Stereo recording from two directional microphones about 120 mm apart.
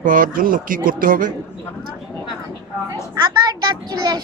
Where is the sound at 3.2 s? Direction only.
35° right (ahead or behind).